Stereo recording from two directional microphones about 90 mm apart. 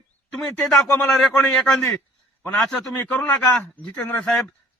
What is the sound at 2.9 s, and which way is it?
A man's voice, 20° left (ahead or behind).